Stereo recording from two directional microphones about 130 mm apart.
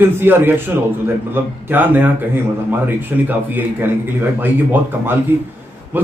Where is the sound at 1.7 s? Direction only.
15° right (ahead or behind).